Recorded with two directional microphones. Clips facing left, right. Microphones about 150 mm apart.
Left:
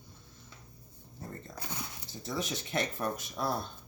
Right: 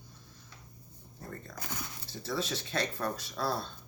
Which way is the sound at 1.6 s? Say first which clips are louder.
Even; 20° left (ahead or behind).